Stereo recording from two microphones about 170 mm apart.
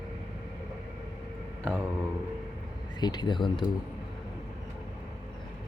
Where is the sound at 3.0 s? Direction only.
25° left (ahead or behind).